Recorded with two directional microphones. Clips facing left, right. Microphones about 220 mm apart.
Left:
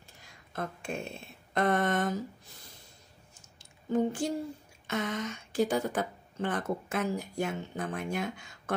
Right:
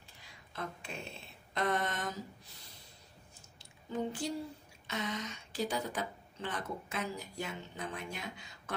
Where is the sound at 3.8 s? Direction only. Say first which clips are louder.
Left 8 dB; 50° left (ahead or behind).